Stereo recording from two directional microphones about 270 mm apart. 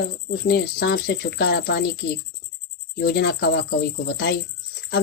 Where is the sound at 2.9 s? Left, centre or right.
Left.